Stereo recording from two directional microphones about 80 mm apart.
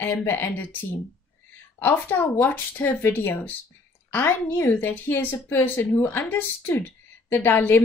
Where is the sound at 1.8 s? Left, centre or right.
Left.